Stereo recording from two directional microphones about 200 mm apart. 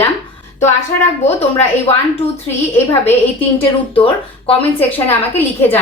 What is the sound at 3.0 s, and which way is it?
A woman's voice, 30° left (ahead or behind).